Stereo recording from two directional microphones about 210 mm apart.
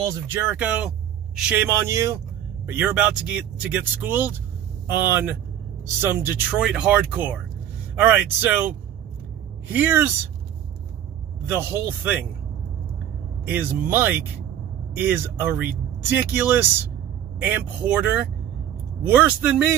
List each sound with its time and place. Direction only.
0.0 s speech: 15° right (ahead or behind)
11.4 s speech: 10° right (ahead or behind)
13.5 s speech: 10° right (ahead or behind)